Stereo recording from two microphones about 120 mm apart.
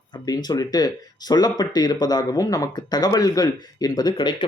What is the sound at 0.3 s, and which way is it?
Speech, 35° left (ahead or behind).